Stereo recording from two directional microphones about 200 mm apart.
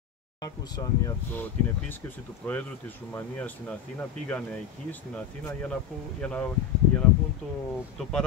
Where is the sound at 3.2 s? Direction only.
10° left (ahead or behind).